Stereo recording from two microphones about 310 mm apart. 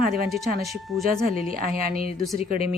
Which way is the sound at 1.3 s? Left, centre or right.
Right.